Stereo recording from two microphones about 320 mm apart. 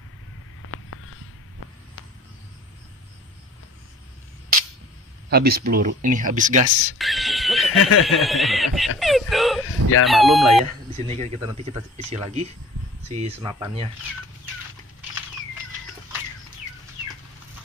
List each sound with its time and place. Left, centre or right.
0.6 s a sound: left
5.3 s speech: right
7.0 s speech: centre
7.8 s speech: left
8.2 s speech: centre
9.7 s speech: left
10.0 s speech: centre
10.6 s speech: centre